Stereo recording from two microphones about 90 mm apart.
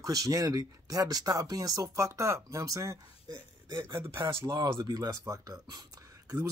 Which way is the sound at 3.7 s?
60° right (ahead or behind).